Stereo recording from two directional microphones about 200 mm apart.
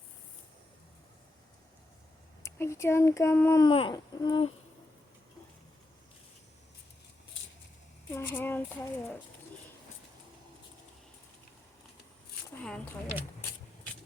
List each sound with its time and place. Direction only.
2.4 s speech: 15° left (ahead or behind)
3.7 s speech: 25° left (ahead or behind)
8.1 s speech: 10° left (ahead or behind)